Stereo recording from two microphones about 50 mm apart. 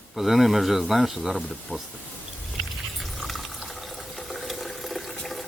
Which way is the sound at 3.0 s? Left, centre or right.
Centre.